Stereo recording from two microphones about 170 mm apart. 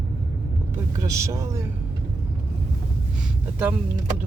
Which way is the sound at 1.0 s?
20° right (ahead or behind).